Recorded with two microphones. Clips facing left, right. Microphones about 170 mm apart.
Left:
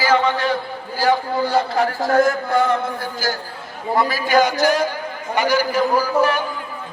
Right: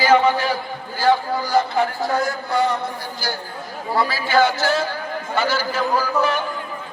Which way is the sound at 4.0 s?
20° left (ahead or behind).